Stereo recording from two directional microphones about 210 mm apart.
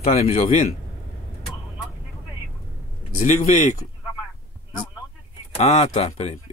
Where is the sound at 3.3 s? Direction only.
35° left (ahead or behind).